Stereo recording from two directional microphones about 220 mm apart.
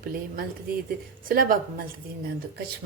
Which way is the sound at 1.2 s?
40° right (ahead or behind).